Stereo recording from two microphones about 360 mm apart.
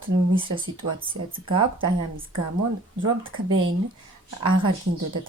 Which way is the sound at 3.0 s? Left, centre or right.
Centre.